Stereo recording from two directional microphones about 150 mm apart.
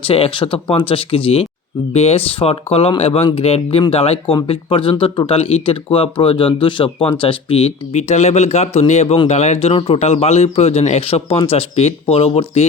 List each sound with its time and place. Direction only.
0.0 s speech: 35° left (ahead or behind)